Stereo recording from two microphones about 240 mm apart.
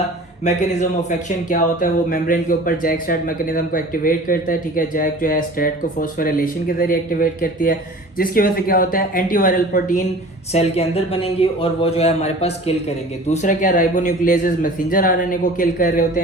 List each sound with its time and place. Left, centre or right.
0.4 s speech: left